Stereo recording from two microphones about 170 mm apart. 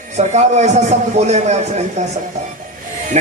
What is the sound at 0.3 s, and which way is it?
A man's voice, 40° right (ahead or behind).